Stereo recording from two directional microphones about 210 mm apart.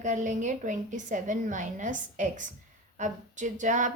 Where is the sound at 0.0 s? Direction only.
35° right (ahead or behind).